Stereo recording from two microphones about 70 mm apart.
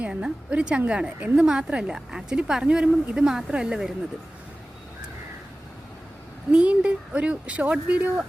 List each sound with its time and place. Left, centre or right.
0.0 s a woman's voice: centre
6.5 s speech: centre